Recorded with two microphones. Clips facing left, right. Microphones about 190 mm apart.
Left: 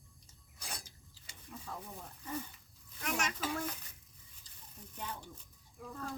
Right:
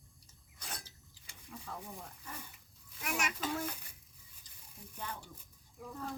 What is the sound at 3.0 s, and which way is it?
Speech, 10° right (ahead or behind).